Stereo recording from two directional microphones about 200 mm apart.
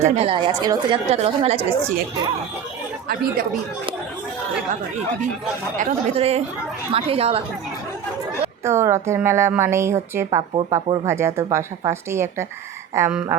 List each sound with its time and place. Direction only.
0.0 s a woman's voice: 30° right (ahead or behind)
5.7 s a woman's voice: 35° right (ahead or behind)
8.6 s speech: 15° right (ahead or behind)